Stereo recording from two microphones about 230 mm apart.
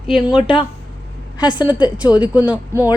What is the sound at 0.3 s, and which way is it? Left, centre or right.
Speech, left.